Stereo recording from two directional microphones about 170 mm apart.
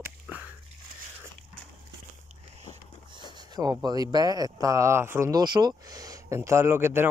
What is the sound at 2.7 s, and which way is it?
Speech, 25° right (ahead or behind).